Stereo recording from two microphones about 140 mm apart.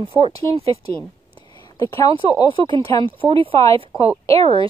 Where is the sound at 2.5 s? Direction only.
40° right (ahead or behind).